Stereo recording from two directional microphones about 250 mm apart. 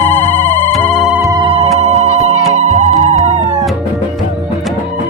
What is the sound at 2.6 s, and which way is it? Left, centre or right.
Music, right.